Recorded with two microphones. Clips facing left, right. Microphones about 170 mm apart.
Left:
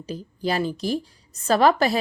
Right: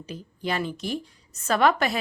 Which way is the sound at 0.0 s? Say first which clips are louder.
Left 5 dB; 35° left (ahead or behind).